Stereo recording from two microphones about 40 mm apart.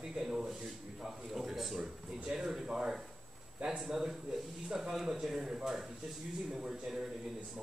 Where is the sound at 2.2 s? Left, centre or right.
Centre.